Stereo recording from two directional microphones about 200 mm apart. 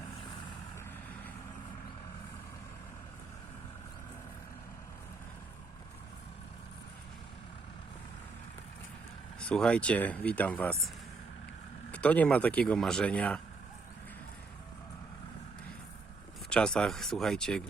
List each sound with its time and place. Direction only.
9.4 s speech: 5° left (ahead or behind)
16.5 s speech: 5° left (ahead or behind)